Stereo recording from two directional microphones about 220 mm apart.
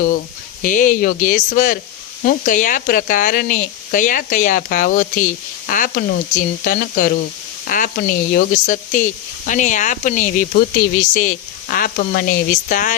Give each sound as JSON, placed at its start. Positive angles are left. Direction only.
{"t": 0.6, "sound": "speech", "side_deg": 40}